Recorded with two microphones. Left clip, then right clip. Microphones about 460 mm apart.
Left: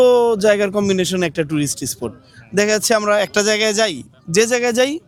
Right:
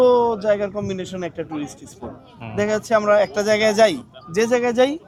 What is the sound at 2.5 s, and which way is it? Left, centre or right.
A man's voice, left.